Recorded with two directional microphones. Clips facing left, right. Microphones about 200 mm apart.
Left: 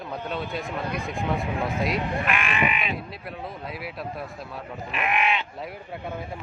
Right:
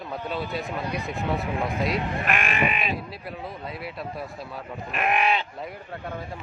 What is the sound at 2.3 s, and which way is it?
Speech, 40° right (ahead or behind).